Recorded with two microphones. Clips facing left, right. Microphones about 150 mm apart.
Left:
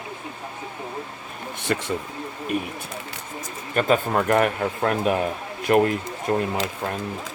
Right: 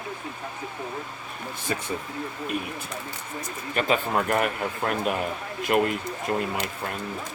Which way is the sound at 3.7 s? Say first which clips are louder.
Left 4 dB; 45° left (ahead or behind).